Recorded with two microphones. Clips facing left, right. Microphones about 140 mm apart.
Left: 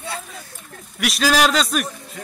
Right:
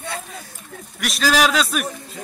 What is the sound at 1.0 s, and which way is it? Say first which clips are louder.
Speech: left 1 dB; centre (ahead or behind).